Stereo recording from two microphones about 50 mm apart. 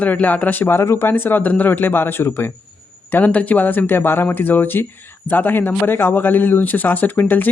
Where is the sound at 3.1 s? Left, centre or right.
Left.